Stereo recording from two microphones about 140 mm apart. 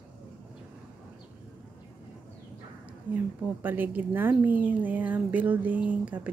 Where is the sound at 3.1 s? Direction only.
10° right (ahead or behind).